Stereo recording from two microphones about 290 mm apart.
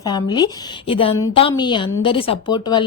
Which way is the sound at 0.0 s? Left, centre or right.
Centre.